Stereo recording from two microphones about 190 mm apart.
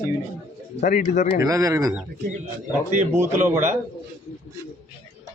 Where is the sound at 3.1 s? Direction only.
10° right (ahead or behind).